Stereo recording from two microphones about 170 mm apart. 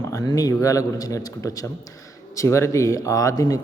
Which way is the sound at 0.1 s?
20° left (ahead or behind).